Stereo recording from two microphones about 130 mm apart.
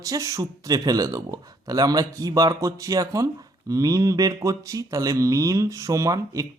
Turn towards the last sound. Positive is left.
turn(degrees=-25)  # may be behind; listen again after turning